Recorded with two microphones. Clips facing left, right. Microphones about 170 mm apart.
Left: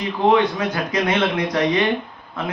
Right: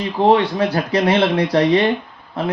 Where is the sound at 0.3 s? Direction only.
30° right (ahead or behind).